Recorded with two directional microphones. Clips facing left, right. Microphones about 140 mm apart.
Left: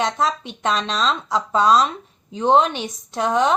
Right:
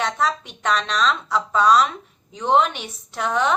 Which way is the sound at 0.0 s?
30° left (ahead or behind).